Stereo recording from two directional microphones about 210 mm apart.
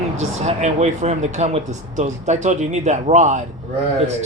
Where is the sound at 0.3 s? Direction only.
30° right (ahead or behind).